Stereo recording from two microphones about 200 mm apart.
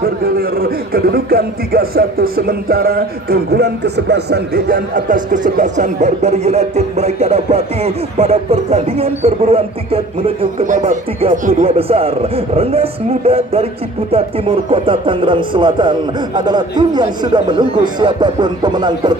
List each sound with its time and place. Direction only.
0.0 s speech: 50° right (ahead or behind); by 19.1 s 20° right (ahead or behind)